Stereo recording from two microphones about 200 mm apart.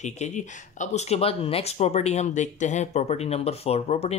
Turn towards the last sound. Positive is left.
turn(degrees=30)  # may be behind; listen again after turning